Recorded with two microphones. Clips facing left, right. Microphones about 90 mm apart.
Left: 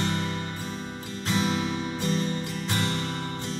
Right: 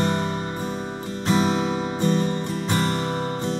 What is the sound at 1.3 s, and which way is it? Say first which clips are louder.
Music: right 6 dB; 40° right (ahead or behind).